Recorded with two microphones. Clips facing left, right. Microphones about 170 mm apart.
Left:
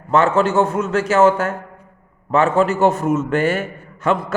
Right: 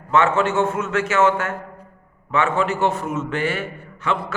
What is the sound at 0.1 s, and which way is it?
A man's voice, 35° left (ahead or behind).